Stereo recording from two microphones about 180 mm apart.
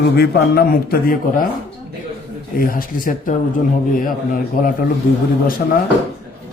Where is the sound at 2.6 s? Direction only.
50° left (ahead or behind).